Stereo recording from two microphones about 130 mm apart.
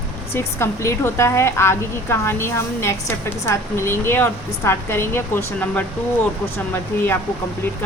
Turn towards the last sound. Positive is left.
turn(degrees=15)  # may be behind; listen again after turning